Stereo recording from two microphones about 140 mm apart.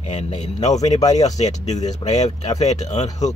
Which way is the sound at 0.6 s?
30° left (ahead or behind).